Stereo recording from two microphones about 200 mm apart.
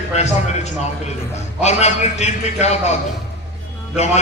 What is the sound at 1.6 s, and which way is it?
A man's voice, 35° left (ahead or behind).